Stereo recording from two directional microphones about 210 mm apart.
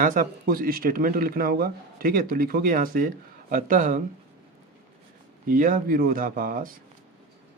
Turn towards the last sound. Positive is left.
turn(degrees=-40)  # may be behind; listen again after turning